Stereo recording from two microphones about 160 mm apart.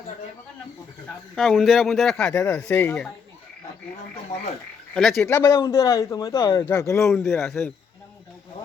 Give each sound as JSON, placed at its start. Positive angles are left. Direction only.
{"t": 1.4, "sound": "speech", "side_deg": 0}
{"t": 4.9, "sound": "speech", "side_deg": 0}
{"t": 5.3, "sound": "a man's voice", "side_deg": 20}